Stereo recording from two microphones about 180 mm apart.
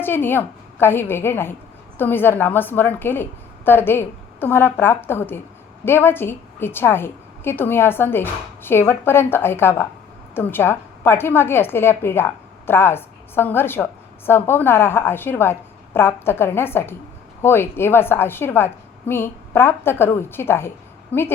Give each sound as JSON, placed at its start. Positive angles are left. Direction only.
{"t": 0.0, "sound": "a woman's voice", "side_deg": 10}